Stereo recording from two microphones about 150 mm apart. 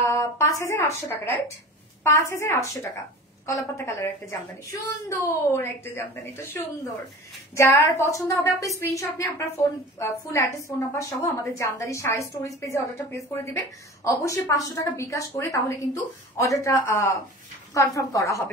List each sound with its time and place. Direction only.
0.0 s a woman's voice: 20° left (ahead or behind)